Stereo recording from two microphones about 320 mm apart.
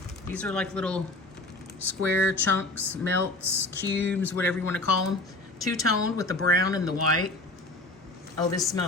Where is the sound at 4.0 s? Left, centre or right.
Centre.